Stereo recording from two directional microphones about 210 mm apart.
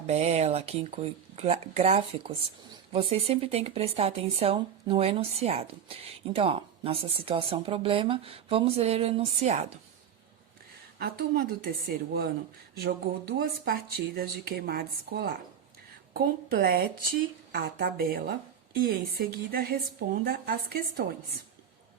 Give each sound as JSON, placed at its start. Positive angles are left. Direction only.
{"t": 0.1, "sound": "speech", "side_deg": -30}
{"t": 10.9, "sound": "speech", "side_deg": -45}
{"t": 12.7, "sound": "speech", "side_deg": -45}